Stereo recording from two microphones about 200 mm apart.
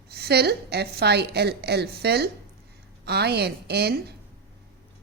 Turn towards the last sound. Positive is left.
turn(degrees=-55)  # may be behind; listen again after turning